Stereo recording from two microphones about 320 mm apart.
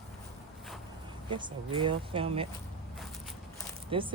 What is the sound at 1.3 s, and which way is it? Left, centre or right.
Speech, centre.